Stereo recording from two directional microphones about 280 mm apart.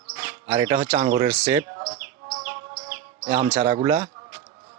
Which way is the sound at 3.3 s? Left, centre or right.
Centre.